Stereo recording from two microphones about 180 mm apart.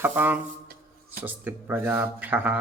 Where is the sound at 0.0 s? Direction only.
10° right (ahead or behind).